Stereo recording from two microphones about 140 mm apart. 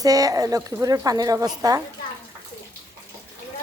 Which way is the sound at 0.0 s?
25° right (ahead or behind).